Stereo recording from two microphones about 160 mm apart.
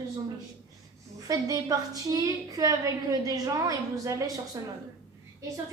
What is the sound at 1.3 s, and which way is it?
A woman's voice, 20° right (ahead or behind).